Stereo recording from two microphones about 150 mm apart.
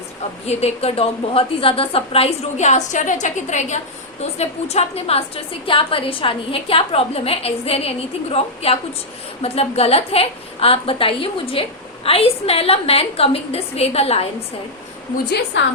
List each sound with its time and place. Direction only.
0.4 s a woman's voice: 45° left (ahead or behind)